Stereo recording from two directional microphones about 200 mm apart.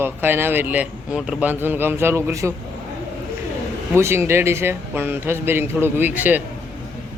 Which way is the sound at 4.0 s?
15° right (ahead or behind).